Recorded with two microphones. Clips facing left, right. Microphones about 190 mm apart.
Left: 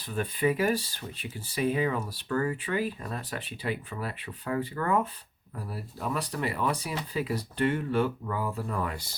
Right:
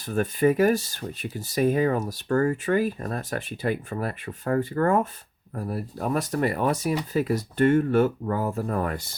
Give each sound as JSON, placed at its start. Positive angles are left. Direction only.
{"t": 0.0, "sound": "speech", "side_deg": -45}